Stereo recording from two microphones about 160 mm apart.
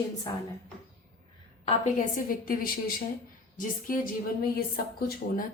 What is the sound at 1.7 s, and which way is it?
A woman's voice, 50° left (ahead or behind).